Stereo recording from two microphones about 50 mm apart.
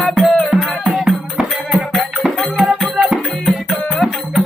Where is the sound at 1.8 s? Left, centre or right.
Centre.